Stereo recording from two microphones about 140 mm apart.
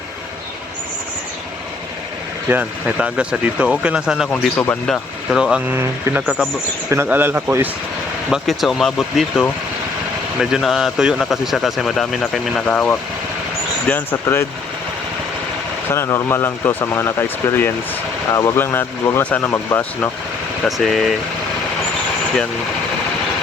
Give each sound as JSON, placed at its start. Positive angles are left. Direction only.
{"t": 2.5, "sound": "speech", "side_deg": -10}
{"t": 4.3, "sound": "speech", "side_deg": 10}
{"t": 4.9, "sound": "speech", "side_deg": -5}
{"t": 5.7, "sound": "speech", "side_deg": -20}
{"t": 6.2, "sound": "speech", "side_deg": -5}
{"t": 6.9, "sound": "speech", "side_deg": -15}
{"t": 8.3, "sound": "speech", "side_deg": 0}
{"t": 10.4, "sound": "speech", "side_deg": 0}
{"t": 15.9, "sound": "speech", "side_deg": 20}
{"t": 20.7, "sound": "speech", "side_deg": 0}